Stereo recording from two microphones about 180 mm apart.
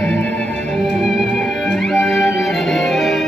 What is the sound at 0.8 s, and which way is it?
Music, centre (ahead or behind).